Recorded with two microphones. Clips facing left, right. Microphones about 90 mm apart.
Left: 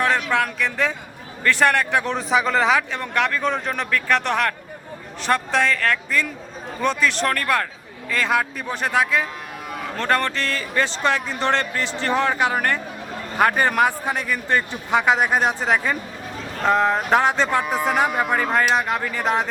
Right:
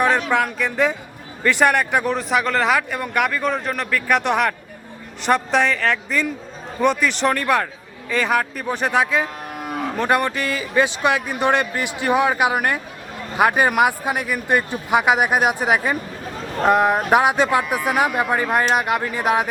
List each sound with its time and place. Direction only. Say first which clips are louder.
0.3 s a man's voice: right 2 dB; 15° right (ahead or behind)
4.1 s a man's voice: right 3 dB; 15° right (ahead or behind)